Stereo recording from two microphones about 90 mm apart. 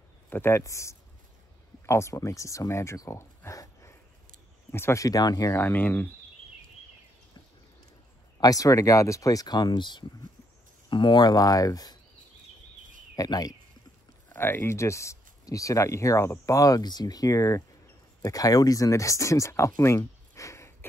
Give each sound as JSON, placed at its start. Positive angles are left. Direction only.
{"t": 0.3, "sound": "speech", "side_deg": 25}
{"t": 5.5, "sound": "speech", "side_deg": 20}
{"t": 8.4, "sound": "speech", "side_deg": 40}
{"t": 13.1, "sound": "speech", "side_deg": 45}
{"t": 14.3, "sound": "speech", "side_deg": 25}